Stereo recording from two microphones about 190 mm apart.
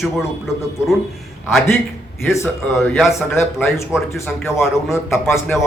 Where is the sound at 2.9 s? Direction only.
Centre (ahead or behind).